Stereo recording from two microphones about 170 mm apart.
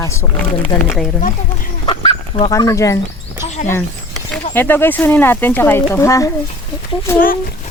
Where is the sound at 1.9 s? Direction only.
30° left (ahead or behind).